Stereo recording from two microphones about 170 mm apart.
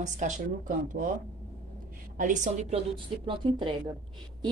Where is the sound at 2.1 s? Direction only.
45° right (ahead or behind).